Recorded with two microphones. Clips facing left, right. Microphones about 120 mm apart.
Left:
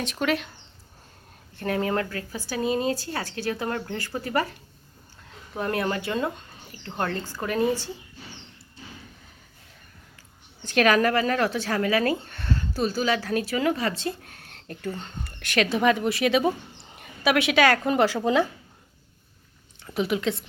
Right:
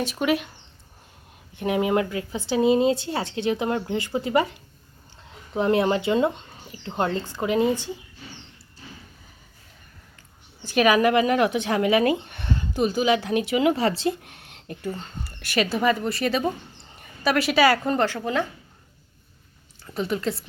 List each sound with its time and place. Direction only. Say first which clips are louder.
0.0 s speech: right 3 dB; 5° right (ahead or behind)
1.5 s speech: right 4 dB; 15° right (ahead or behind)
5.5 s speech: right 6 dB; 20° right (ahead or behind)
10.6 s speech: right 2 dB; 10° right (ahead or behind)
17.8 s a woman's voice: left 2 dB; 10° left (ahead or behind)
19.8 s a woman's voice: left 1 dB; 5° left (ahead or behind)